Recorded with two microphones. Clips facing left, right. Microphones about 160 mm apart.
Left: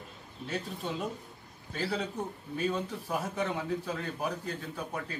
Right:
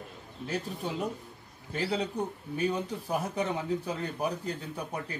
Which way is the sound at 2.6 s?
15° right (ahead or behind).